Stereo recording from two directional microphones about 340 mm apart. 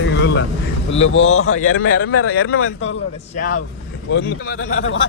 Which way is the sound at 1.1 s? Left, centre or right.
Centre.